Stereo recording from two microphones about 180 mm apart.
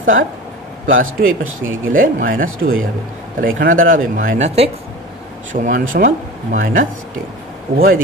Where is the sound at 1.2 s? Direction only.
60° right (ahead or behind); by 4.7 s 35° right (ahead or behind).